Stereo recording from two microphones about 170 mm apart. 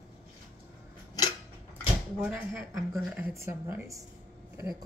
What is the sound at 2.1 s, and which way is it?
Speech, 10° right (ahead or behind).